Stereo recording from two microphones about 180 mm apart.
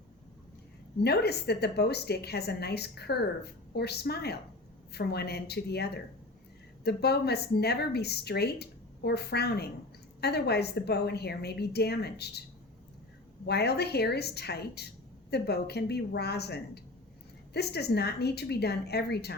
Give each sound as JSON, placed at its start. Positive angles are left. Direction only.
{"t": 1.0, "sound": "a woman's voice", "side_deg": 65}
{"t": 13.4, "sound": "a woman's voice", "side_deg": 65}